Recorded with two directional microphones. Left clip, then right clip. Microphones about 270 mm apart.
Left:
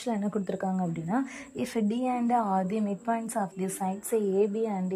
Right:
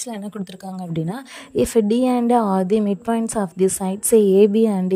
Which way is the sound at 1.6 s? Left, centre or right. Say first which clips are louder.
Right 13 dB; right.